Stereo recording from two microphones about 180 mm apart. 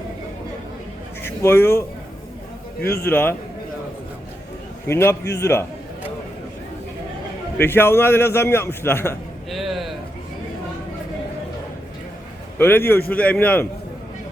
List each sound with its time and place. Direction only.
1.2 s a man's voice: 15° left (ahead or behind)
2.8 s a man's voice: 60° left (ahead or behind)
3.1 s a man's voice: 10° left (ahead or behind)
4.9 s a man's voice: 15° left (ahead or behind)
7.6 s a man's voice: 10° left (ahead or behind)
9.5 s a sound: centre (ahead or behind)
12.5 s a man's voice: 10° left (ahead or behind)